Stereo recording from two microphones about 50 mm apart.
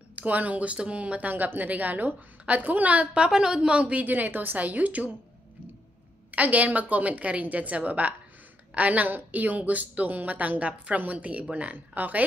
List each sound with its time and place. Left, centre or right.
0.1 s speech: right
3.3 s speech: centre; by 5.1 s right
6.3 s speech: right